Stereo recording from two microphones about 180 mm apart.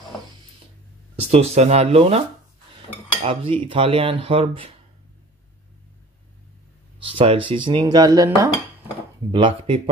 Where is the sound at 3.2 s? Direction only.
30° right (ahead or behind).